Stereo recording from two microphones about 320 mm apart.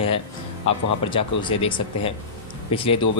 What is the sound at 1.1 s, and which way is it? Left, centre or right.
Speech, centre.